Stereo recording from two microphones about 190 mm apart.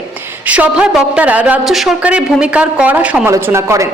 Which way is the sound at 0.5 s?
5° right (ahead or behind).